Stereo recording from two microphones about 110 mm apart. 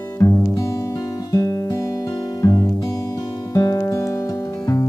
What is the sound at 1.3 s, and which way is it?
Guitar, 30° left (ahead or behind).